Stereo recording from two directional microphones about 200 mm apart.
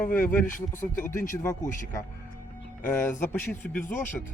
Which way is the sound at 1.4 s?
15° left (ahead or behind).